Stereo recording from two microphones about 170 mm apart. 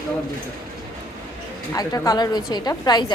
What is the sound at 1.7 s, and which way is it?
A woman's voice, 20° left (ahead or behind).